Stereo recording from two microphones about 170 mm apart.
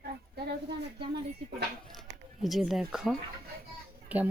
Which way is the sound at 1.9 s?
Centre (ahead or behind).